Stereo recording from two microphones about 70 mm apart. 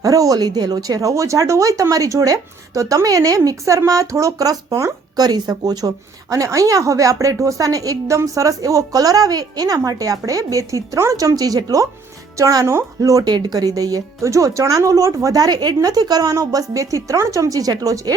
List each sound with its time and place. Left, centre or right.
0.0 s speech: right
6.3 s speech: right
13.0 s speech: right
13.3 s speech: right